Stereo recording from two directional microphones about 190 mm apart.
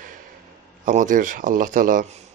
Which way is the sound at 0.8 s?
45° right (ahead or behind).